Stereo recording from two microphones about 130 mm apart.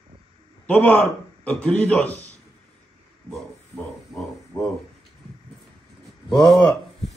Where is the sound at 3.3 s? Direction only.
5° left (ahead or behind).